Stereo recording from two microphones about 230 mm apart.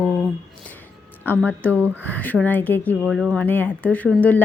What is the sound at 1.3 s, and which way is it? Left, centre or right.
A woman's voice, centre.